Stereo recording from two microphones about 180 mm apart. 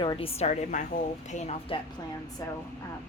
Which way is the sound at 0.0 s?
30° left (ahead or behind).